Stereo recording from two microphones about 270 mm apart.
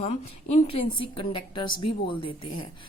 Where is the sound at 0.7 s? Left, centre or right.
Left.